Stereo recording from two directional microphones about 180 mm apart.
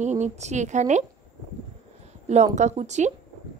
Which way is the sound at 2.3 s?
40° right (ahead or behind).